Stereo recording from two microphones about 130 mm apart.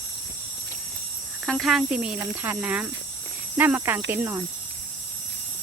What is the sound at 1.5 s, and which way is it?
Speech, centre (ahead or behind).